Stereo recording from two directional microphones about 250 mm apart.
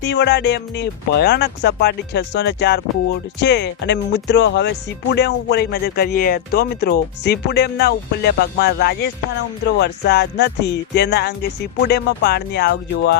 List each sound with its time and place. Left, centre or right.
0.0 s speech: left